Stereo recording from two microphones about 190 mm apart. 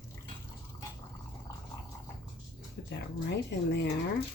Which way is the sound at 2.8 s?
70° left (ahead or behind).